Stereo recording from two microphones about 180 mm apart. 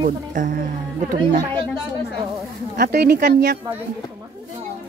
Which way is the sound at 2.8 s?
60° right (ahead or behind).